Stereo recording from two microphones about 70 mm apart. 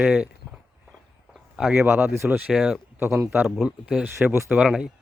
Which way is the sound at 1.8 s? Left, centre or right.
Right.